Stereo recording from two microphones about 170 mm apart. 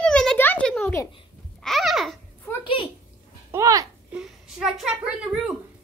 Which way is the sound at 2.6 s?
30° left (ahead or behind).